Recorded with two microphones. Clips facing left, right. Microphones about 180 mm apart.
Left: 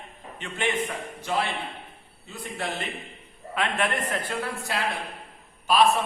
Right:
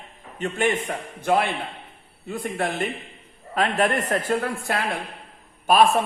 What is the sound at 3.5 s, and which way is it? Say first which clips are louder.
A man's voice: right 5 dB; 40° right (ahead or behind).